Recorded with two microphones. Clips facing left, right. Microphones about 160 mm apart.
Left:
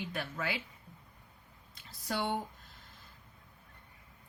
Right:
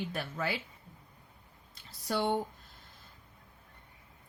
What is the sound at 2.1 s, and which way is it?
Speech, 35° right (ahead or behind).